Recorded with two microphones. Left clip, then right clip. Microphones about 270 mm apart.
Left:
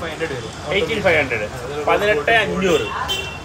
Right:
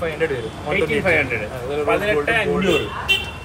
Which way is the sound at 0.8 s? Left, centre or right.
Centre.